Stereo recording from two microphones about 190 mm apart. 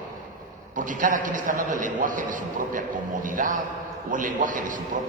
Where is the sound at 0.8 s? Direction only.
45° right (ahead or behind).